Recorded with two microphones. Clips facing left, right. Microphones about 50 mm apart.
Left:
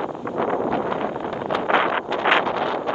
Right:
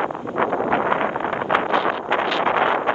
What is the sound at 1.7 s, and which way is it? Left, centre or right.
Wind noise, left.